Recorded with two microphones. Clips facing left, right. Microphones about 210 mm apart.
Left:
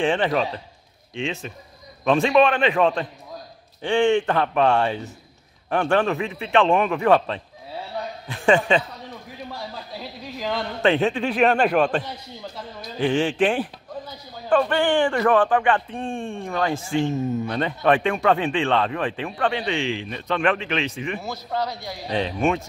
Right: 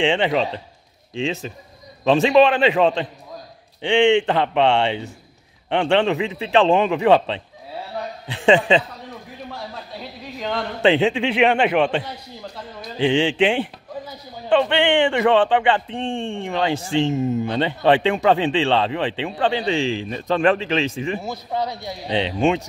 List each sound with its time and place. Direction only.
0.2 s speech: 20° right (ahead or behind)
1.2 s speech: 30° right (ahead or behind)
8.5 s speech: 20° right (ahead or behind)
9.4 s a man's voice: centre (ahead or behind)
11.0 s a man's voice: 15° right (ahead or behind)
13.0 s speech: 25° right (ahead or behind)
21.2 s speech: 20° right (ahead or behind)